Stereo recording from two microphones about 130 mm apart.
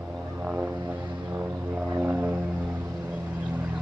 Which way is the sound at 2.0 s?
10° right (ahead or behind).